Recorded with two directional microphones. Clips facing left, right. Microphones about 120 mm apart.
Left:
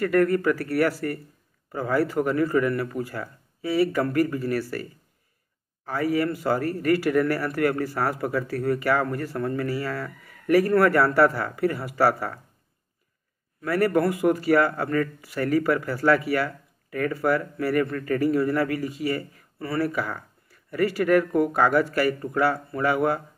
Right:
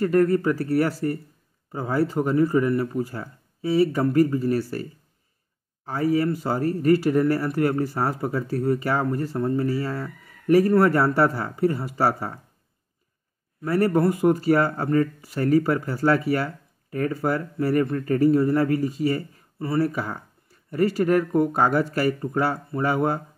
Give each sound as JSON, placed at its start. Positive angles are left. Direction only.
{"t": 0.0, "sound": "speech", "side_deg": -30}
{"t": 5.9, "sound": "speech", "side_deg": -30}
{"t": 13.6, "sound": "speech", "side_deg": -30}